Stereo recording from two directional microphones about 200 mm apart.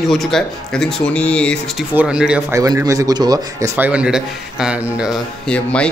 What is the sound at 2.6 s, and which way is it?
A man's voice, 20° right (ahead or behind).